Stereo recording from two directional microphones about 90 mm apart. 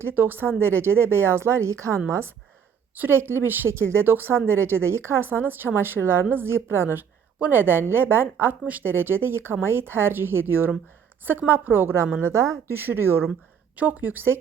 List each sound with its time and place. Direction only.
0.0 s a woman's voice: 20° right (ahead or behind)